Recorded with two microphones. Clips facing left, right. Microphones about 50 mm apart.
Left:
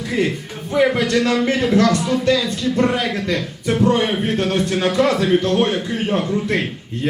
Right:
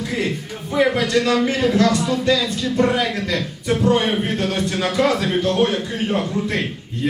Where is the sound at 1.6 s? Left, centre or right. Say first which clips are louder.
Left 1 dB; left.